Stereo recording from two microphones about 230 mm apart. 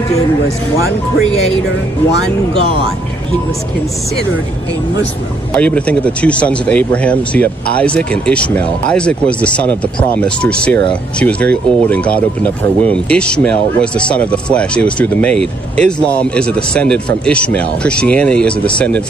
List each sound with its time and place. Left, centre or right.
2.5 s speech: right
5.6 s speech: centre